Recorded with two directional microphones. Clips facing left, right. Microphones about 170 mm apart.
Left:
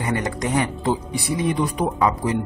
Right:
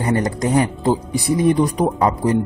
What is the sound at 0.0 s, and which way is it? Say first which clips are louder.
Speech: right 5 dB; 35° right (ahead or behind).